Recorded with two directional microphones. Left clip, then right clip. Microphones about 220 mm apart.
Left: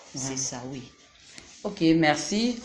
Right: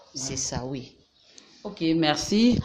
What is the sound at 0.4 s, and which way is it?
Speech, 45° right (ahead or behind).